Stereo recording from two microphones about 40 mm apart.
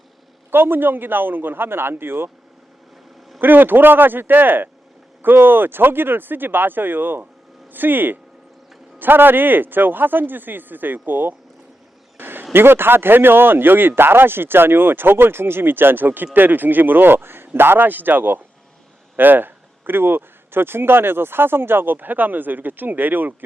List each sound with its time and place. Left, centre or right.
0.5 s speech: right
3.4 s speech: right
12.1 s a sound: right
12.5 s speech: right